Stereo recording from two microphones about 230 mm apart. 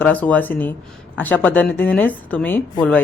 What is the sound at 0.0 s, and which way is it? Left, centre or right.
A woman's voice, centre.